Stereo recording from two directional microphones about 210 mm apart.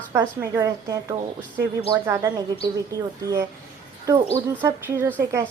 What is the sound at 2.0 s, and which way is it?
A woman's voice, 15° right (ahead or behind).